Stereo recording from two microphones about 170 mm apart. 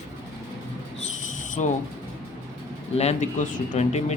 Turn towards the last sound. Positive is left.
turn(degrees=45)  # may be behind; listen again after turning